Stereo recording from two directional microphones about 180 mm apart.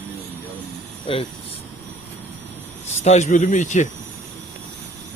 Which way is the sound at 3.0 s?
40° left (ahead or behind).